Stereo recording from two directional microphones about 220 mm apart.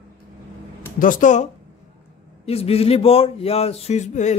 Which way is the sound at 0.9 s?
40° left (ahead or behind).